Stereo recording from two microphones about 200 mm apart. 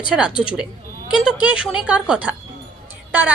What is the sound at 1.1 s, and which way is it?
A woman's voice, 5° right (ahead or behind).